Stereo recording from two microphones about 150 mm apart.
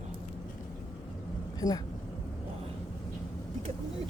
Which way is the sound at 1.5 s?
25° left (ahead or behind).